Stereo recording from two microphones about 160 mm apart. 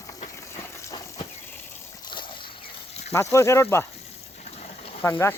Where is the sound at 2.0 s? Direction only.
30° left (ahead or behind).